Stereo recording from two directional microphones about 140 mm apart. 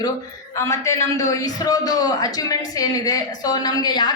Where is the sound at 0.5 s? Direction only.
20° left (ahead or behind).